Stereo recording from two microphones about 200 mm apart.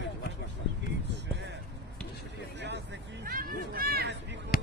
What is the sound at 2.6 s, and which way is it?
Speech, 60° right (ahead or behind).